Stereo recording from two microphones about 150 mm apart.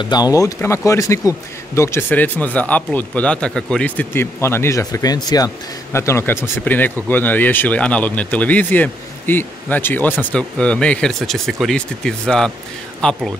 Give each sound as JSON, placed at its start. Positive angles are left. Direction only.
{"t": 0.0, "sound": "speech", "side_deg": 25}